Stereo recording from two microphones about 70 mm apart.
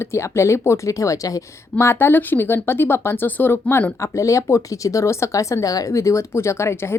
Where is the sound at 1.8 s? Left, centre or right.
Left.